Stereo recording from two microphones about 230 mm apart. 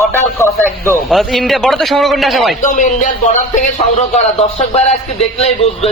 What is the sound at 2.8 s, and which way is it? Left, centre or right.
A man's voice, left.